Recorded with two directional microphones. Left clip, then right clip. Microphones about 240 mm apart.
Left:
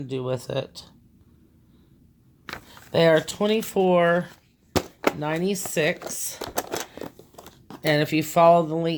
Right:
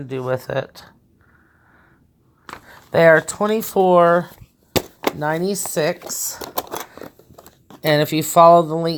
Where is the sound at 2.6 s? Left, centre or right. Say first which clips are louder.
Right 7 dB; right.